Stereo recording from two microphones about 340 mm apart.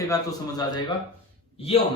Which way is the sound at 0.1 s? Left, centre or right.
Centre.